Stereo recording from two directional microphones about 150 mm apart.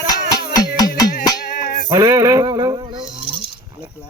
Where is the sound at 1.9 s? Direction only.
20° right (ahead or behind).